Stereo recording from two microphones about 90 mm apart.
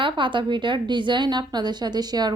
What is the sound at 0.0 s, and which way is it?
A woman's voice, 65° right (ahead or behind).